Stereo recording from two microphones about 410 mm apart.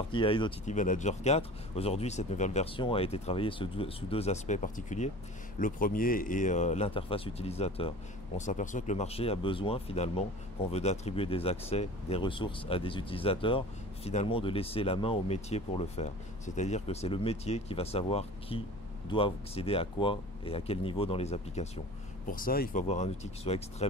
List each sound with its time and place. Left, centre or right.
0.1 s speech: centre